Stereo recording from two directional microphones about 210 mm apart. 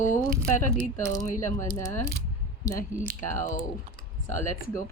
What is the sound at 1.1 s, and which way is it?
Speech, 15° left (ahead or behind).